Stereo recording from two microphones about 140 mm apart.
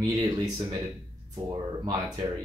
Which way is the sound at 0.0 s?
25° right (ahead or behind).